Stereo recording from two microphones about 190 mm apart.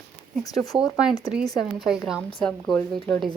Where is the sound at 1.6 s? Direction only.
Centre (ahead or behind).